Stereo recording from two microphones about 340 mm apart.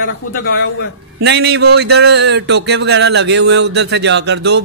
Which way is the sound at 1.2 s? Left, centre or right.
Right.